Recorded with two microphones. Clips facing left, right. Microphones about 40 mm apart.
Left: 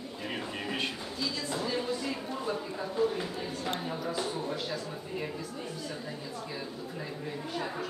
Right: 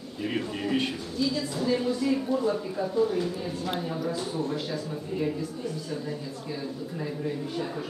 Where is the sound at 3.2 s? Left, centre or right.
Centre.